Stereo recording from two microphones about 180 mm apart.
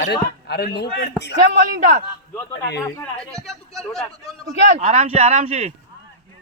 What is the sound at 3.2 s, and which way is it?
Speech, 5° left (ahead or behind).